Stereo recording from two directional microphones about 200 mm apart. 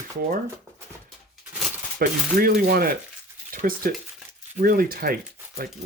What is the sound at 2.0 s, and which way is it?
Speech, 50° right (ahead or behind).